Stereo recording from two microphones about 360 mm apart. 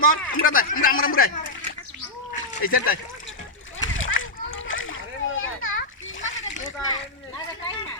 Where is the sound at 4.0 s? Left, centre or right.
Left.